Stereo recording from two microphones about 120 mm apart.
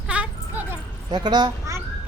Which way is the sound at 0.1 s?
10° right (ahead or behind).